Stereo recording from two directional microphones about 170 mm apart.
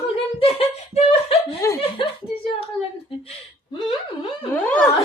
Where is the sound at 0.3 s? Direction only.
35° left (ahead or behind).